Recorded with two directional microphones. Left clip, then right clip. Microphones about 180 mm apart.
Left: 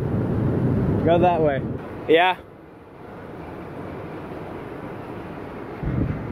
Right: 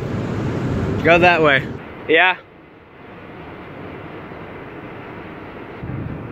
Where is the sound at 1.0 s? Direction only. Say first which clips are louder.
Right 6 dB; 20° right (ahead or behind).